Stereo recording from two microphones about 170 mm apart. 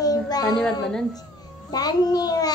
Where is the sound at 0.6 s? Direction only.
5° left (ahead or behind).